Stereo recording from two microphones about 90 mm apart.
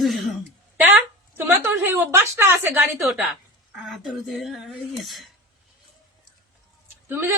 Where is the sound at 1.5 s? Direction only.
20° right (ahead or behind).